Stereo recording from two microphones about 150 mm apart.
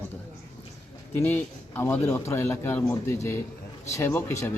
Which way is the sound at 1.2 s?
10° left (ahead or behind).